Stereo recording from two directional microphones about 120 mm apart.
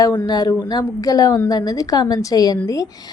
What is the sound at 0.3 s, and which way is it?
A woman's voice, 35° left (ahead or behind).